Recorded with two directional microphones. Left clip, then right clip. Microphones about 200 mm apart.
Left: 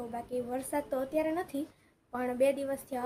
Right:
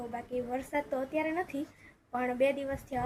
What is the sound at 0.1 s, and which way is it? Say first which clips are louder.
A woman's voice: even; 5° left (ahead or behind).